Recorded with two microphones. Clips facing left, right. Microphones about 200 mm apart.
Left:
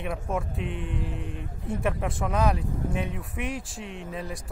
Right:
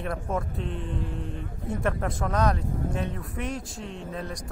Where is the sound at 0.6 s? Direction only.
30° right (ahead or behind).